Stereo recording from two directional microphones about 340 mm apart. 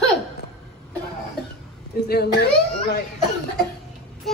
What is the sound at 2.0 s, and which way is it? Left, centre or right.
Speech, left.